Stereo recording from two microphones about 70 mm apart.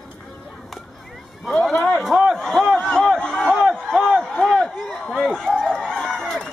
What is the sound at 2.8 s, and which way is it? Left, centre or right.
Speech, centre.